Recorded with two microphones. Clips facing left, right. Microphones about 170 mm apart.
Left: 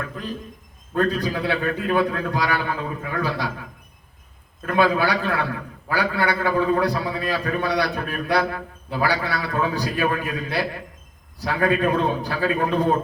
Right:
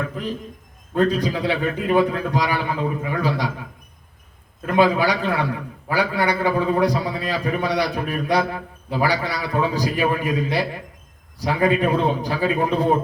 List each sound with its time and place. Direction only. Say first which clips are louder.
0.9 s a man's voice: right 2 dB; 20° right (ahead or behind)
4.6 s a man's voice: right 2 dB; 20° right (ahead or behind)